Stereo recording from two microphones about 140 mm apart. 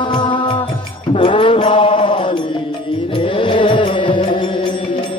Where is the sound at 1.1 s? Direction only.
40° left (ahead or behind).